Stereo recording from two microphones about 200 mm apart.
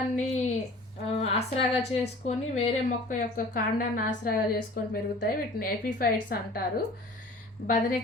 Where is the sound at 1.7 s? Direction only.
30° left (ahead or behind); by 6.1 s 45° left (ahead or behind).